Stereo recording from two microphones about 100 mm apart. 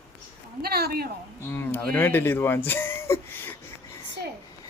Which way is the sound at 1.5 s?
25° left (ahead or behind).